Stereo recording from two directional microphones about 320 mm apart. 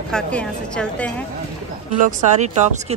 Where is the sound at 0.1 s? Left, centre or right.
Centre.